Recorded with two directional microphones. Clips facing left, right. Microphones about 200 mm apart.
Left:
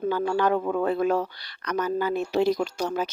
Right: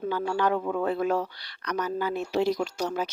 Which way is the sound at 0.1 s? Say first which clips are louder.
Left 2 dB; 50° left (ahead or behind).